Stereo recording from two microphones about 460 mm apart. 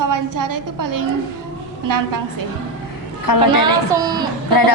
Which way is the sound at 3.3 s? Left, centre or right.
Left.